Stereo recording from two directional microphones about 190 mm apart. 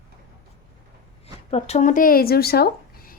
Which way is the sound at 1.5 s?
35° left (ahead or behind).